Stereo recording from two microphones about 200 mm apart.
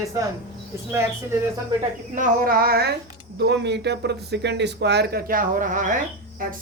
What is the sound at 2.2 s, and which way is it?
Speech, 45° right (ahead or behind).